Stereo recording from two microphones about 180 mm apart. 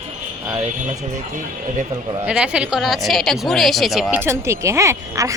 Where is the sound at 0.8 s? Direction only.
45° right (ahead or behind).